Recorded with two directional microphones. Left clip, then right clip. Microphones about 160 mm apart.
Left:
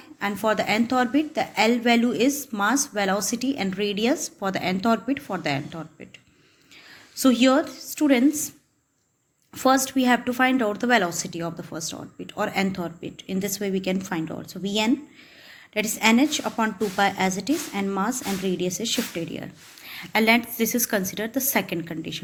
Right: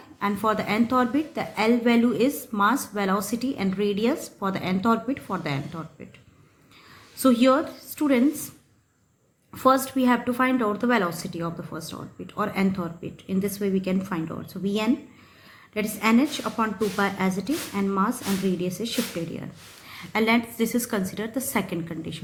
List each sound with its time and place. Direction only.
0.2 s a woman's voice: 25° left (ahead or behind)
7.2 s a woman's voice: 25° left (ahead or behind)
9.6 s a woman's voice: 25° left (ahead or behind)